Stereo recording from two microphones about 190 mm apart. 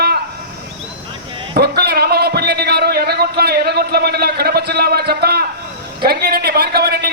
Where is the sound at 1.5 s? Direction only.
55° right (ahead or behind).